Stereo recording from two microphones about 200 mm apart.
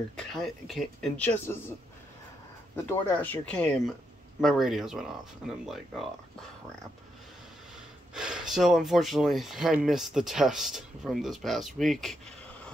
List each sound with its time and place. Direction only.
0.1 s speech: centre (ahead or behind)
2.7 s speech: 10° left (ahead or behind)
8.1 s speech: 5° right (ahead or behind)